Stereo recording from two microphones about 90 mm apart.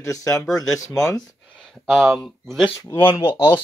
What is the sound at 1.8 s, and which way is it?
Speech, 5° left (ahead or behind).